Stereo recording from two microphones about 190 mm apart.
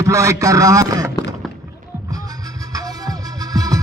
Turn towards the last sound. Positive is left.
turn(degrees=-20)  # may be behind; listen again after turning